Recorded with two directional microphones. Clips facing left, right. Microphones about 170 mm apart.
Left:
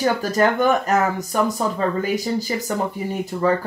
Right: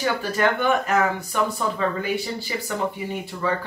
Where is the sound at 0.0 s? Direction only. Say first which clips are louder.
Left 4 dB; 40° left (ahead or behind).